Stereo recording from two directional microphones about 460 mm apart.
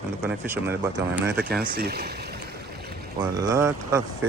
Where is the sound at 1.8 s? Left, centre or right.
Right.